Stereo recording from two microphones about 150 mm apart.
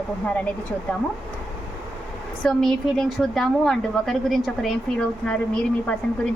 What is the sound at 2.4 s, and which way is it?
A woman's voice, 5° left (ahead or behind).